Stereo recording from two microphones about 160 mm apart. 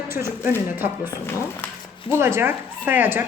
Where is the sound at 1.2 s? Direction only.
15° left (ahead or behind).